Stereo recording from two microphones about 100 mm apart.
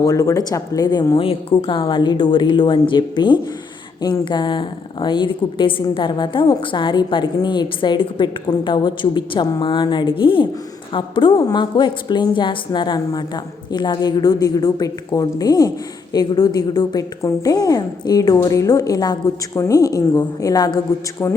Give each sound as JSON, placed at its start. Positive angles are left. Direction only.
{"t": 0.0, "sound": "a woman's voice", "side_deg": 35}
{"t": 1.2, "sound": "a woman's voice", "side_deg": 65}